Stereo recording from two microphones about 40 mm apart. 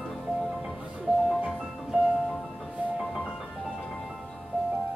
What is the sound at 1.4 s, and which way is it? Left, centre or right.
Music, right.